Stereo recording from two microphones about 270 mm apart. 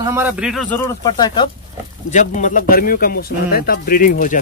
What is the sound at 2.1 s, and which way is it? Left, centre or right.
Speech, left.